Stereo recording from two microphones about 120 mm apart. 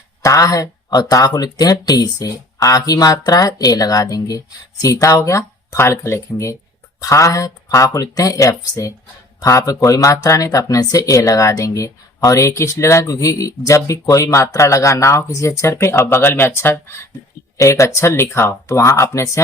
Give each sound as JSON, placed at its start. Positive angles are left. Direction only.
{"t": 0.2, "sound": "speech", "side_deg": 30}